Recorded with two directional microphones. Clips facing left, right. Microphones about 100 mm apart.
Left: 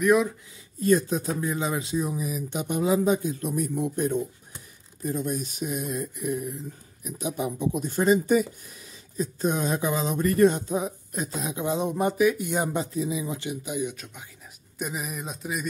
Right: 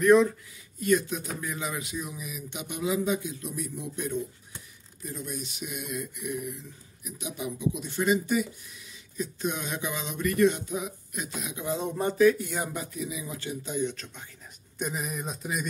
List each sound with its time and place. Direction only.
0.0 s speech: 10° left (ahead or behind)
0.7 s speech: 35° left (ahead or behind)
11.6 s speech: 20° left (ahead or behind); by 15.6 s centre (ahead or behind)